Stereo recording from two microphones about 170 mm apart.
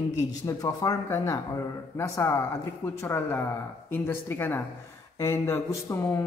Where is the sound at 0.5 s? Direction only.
20° left (ahead or behind).